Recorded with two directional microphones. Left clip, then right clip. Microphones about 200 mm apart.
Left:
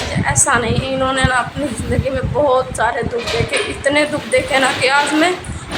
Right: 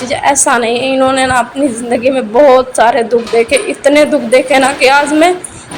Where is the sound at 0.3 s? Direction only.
30° right (ahead or behind).